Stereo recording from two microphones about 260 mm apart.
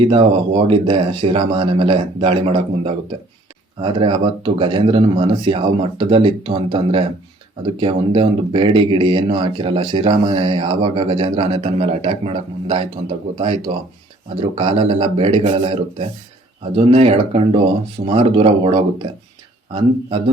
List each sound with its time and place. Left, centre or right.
0.0 s speech: right